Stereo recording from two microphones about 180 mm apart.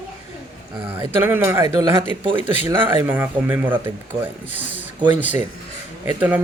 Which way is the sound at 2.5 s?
10° right (ahead or behind).